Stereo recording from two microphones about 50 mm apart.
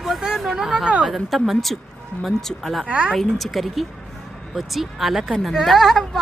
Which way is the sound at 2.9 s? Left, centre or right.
Right.